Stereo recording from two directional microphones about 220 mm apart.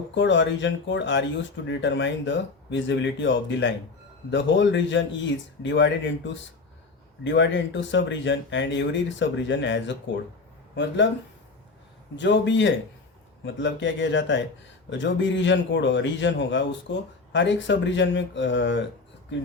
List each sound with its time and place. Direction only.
0.1 s speech: 55° left (ahead or behind)
12.1 s speech: 55° left (ahead or behind)